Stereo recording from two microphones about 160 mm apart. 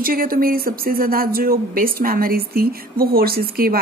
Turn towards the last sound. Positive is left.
turn(degrees=-70)  # may be behind; listen again after turning